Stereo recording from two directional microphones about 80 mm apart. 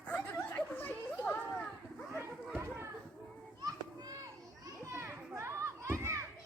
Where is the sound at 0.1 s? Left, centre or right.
Left.